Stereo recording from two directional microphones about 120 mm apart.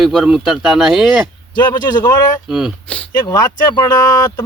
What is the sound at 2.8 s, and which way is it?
Speech, 10° left (ahead or behind).